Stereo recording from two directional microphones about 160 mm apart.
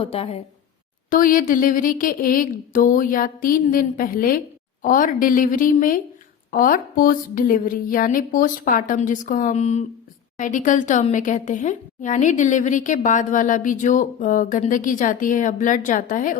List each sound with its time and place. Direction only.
0.0 s a woman's voice: 40° left (ahead or behind)
1.1 s a woman's voice: 60° left (ahead or behind)